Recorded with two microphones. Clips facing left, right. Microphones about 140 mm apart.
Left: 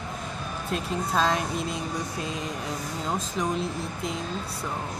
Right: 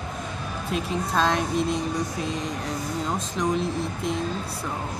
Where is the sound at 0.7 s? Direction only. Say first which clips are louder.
Right 1 dB; centre (ahead or behind).